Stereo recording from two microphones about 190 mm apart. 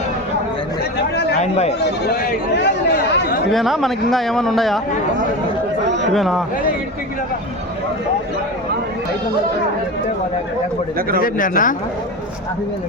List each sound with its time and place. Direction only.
1.1 s chatter: 65° left (ahead or behind)
1.4 s speech: 35° left (ahead or behind)
1.8 s speech: 60° left (ahead or behind)
3.5 s speech: centre (ahead or behind)
6.1 s speech: centre (ahead or behind)
11.2 s speech: 45° left (ahead or behind)